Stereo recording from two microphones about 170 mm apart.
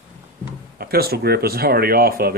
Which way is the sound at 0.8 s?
65° right (ahead or behind).